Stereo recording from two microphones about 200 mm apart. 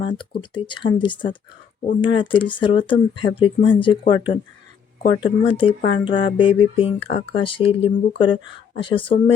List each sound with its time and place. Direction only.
0.0 s speech: 25° left (ahead or behind)